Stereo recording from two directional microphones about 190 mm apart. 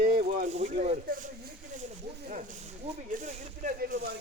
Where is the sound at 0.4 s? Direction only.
40° right (ahead or behind).